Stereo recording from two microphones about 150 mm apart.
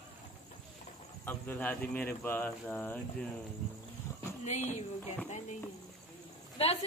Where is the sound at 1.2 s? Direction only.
10° left (ahead or behind).